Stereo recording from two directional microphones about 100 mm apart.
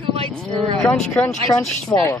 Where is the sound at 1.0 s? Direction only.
20° left (ahead or behind).